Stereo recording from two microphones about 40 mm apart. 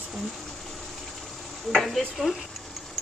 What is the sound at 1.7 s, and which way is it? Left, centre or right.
Stir, centre.